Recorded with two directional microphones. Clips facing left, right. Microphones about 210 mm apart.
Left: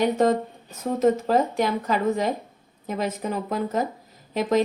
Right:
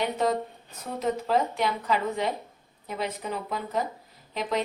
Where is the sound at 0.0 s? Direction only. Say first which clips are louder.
Left 6 dB; 45° left (ahead or behind).